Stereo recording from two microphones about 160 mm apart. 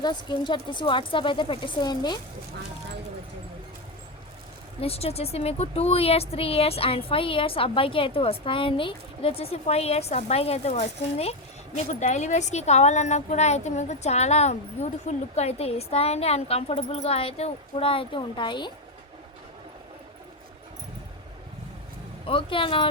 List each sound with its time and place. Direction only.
0.0 s a woman's voice: 30° left (ahead or behind)
4.8 s a woman's voice: 40° left (ahead or behind)
22.3 s a woman's voice: 35° left (ahead or behind)